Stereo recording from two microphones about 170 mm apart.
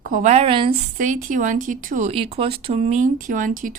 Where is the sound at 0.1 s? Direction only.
45° right (ahead or behind).